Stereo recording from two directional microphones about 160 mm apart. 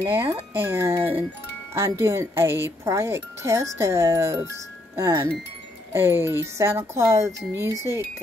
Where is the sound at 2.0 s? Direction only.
15° right (ahead or behind).